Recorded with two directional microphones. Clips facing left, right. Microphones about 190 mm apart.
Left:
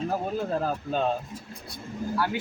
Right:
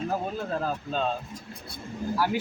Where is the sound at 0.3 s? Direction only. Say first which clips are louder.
Left 2 dB; 10° left (ahead or behind).